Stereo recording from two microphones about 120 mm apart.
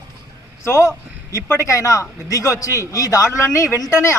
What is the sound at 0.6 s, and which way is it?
A man's voice, 20° left (ahead or behind).